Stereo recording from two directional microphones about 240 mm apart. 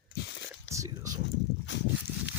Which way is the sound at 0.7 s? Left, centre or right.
Centre.